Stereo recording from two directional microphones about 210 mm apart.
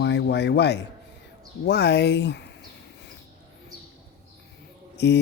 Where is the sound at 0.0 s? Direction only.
55° left (ahead or behind).